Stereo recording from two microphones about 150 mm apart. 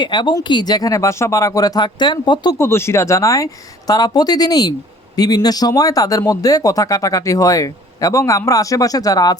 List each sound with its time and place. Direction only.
0.0 s speech: 30° left (ahead or behind)
2.6 s speech: 15° left (ahead or behind)